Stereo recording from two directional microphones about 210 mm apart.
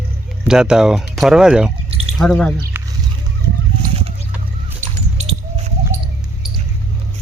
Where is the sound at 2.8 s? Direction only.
10° right (ahead or behind).